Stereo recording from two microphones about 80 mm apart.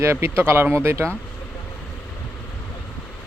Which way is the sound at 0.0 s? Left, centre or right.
Right.